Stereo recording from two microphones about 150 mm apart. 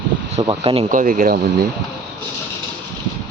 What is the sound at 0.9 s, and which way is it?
Speech, 65° right (ahead or behind).